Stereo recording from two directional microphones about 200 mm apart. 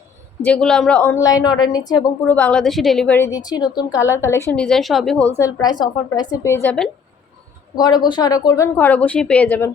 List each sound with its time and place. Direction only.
0.4 s a woman's voice: 5° left (ahead or behind)
1.5 s a woman's voice: 20° left (ahead or behind)
5.5 s a woman's voice: 20° left (ahead or behind)
7.8 s a woman's voice: 20° left (ahead or behind)